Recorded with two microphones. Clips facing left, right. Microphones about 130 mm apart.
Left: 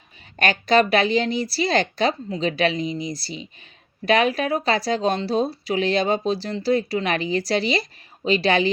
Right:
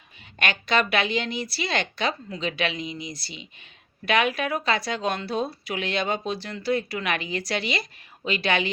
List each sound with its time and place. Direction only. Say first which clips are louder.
0.3 s speech: left 6 dB; 40° left (ahead or behind)